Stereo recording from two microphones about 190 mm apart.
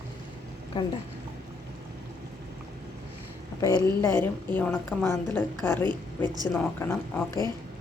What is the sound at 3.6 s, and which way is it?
A woman's voice, 15° left (ahead or behind).